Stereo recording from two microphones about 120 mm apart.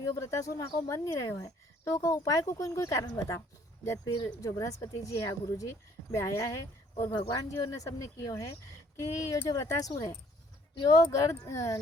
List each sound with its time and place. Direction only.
0.0 s speech: 25° left (ahead or behind)
7.2 s speech: 40° left (ahead or behind)
7.5 s speech: 25° left (ahead or behind)